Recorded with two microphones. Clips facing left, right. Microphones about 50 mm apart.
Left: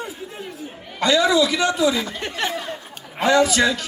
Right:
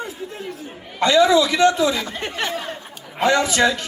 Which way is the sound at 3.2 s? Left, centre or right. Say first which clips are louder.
Even; right.